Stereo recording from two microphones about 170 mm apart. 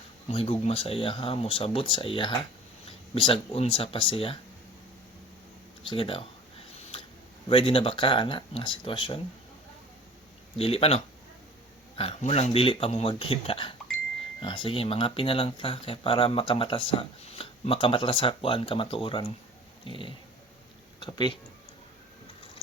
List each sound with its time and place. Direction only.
0.3 s speech: 35° left (ahead or behind)
5.8 s speech: 30° left (ahead or behind)
7.4 s speech: 30° left (ahead or behind)
10.6 s speech: 35° left (ahead or behind)
19.8 s a sound: 30° left (ahead or behind)